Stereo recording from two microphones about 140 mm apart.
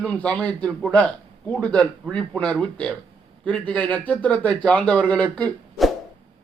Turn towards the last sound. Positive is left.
turn(degrees=5)  # may be behind; listen again after turning